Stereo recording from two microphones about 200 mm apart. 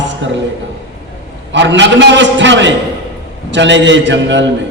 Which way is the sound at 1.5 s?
65° right (ahead or behind).